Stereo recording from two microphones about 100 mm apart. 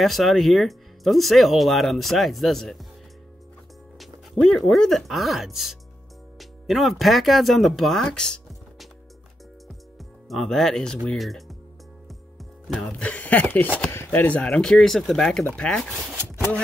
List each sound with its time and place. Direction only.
0.0 s speech: centre (ahead or behind)
4.0 s speech: 5° left (ahead or behind)
9.9 s speech: centre (ahead or behind)
12.6 s music: centre (ahead or behind)
13.0 s speech: 15° left (ahead or behind)